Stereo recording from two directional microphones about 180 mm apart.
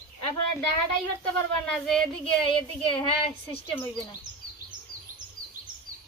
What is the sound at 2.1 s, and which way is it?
A woman's voice, 30° left (ahead or behind).